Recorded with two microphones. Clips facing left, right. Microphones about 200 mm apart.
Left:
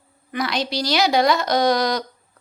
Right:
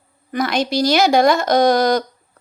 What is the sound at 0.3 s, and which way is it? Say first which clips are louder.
A woman's voice: right 5 dB; 45° right (ahead or behind).